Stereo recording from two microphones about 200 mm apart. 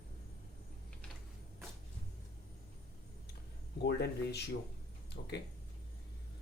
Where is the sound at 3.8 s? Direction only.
55° left (ahead or behind).